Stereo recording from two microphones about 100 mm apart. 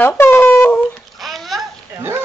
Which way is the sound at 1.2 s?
Centre (ahead or behind).